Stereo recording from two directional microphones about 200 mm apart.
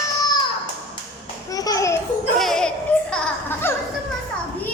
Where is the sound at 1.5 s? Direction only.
20° left (ahead or behind).